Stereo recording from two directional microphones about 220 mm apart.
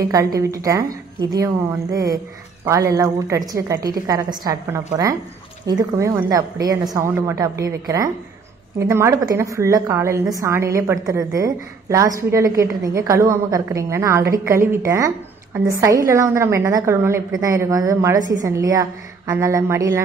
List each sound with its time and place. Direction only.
0.0 s a woman's voice: 15° right (ahead or behind)